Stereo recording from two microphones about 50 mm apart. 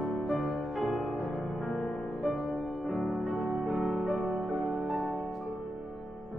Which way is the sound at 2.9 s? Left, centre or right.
Centre.